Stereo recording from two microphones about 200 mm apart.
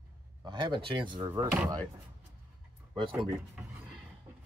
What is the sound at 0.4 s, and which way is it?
Speech, 20° right (ahead or behind).